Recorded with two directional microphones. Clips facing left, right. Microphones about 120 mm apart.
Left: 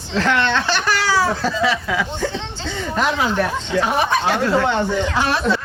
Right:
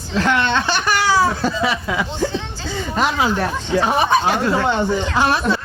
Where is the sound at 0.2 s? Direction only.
15° right (ahead or behind).